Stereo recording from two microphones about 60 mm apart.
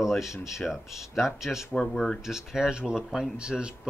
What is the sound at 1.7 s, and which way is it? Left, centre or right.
Speech, centre.